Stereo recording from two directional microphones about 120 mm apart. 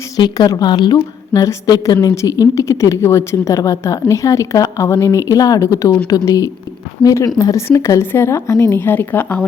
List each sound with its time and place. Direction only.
0.2 s a woman's voice: 35° left (ahead or behind); by 9.5 s 15° left (ahead or behind)